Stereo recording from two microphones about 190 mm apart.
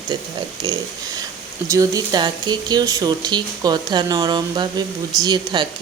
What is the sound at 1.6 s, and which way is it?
Speech, 15° right (ahead or behind).